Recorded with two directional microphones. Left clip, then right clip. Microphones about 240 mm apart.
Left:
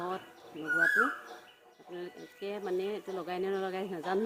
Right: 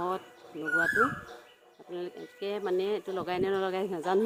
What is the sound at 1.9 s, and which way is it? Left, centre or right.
Speech, right.